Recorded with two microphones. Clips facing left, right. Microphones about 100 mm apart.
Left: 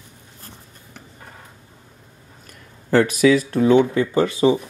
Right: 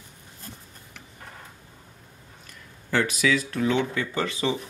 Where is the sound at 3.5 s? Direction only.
35° left (ahead or behind).